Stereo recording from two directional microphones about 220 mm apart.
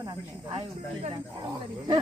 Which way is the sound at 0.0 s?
20° right (ahead or behind).